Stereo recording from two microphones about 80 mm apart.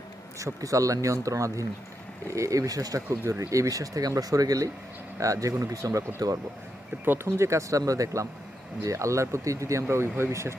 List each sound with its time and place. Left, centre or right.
0.3 s speech: right
6.9 s speech: right